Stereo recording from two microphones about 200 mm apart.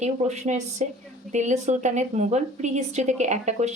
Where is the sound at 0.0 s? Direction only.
35° right (ahead or behind).